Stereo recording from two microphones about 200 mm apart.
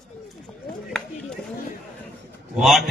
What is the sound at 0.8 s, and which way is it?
Chop, centre (ahead or behind).